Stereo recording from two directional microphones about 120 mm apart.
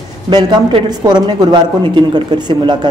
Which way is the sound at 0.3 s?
35° right (ahead or behind).